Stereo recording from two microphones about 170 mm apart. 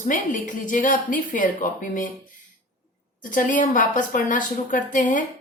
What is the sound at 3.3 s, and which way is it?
A woman's voice, 50° left (ahead or behind).